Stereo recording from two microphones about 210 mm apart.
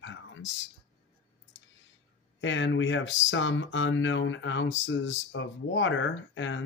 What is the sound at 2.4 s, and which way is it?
Speech, 65° left (ahead or behind).